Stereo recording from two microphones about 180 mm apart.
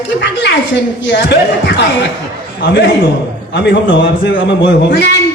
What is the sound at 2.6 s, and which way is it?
A man's voice, 80° left.